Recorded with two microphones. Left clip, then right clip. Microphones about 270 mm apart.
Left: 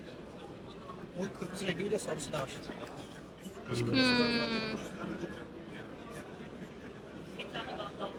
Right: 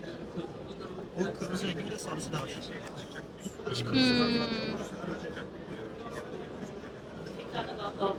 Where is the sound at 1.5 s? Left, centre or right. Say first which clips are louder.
Right 2 dB; centre.